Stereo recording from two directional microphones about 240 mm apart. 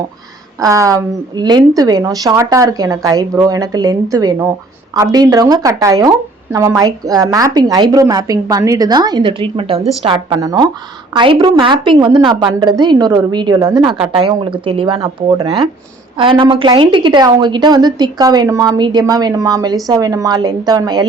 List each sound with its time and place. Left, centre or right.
0.6 s a woman's voice: centre